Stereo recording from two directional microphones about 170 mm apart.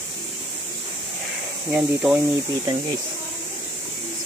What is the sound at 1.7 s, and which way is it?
Speech, 5° right (ahead or behind).